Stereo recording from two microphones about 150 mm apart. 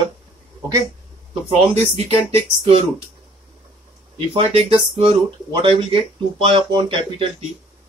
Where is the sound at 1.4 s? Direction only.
45° right (ahead or behind).